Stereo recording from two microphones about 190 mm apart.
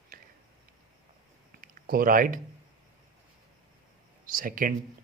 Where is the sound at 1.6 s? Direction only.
50° right (ahead or behind).